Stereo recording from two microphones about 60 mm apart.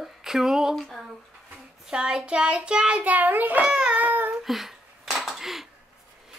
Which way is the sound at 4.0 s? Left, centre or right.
Right.